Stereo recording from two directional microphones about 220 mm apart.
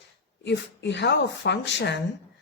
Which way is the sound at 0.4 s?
50° left (ahead or behind).